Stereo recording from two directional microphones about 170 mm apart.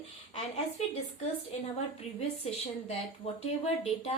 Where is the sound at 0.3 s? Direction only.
35° left (ahead or behind).